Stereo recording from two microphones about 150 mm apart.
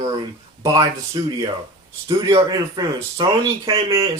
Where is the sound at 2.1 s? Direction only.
25° right (ahead or behind).